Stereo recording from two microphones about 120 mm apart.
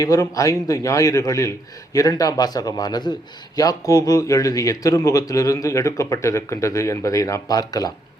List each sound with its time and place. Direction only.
0.0 s a man's voice: 30° left (ahead or behind)